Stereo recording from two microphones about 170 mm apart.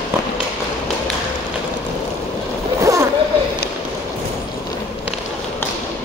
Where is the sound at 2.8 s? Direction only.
20° right (ahead or behind).